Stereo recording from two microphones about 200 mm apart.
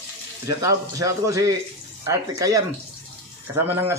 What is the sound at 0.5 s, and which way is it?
A man's voice, 15° right (ahead or behind).